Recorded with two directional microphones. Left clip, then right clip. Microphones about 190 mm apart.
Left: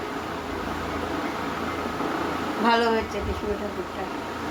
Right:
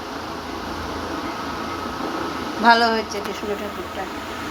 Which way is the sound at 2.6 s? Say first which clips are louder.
Right 6 dB; 15° right (ahead or behind).